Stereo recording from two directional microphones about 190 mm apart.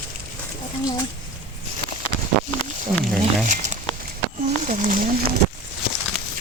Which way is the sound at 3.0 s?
Centre (ahead or behind).